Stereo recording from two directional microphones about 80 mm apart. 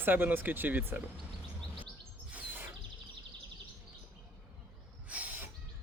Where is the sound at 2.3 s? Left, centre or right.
Right.